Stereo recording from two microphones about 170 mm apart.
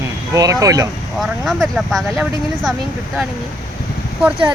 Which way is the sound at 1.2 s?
Centre (ahead or behind).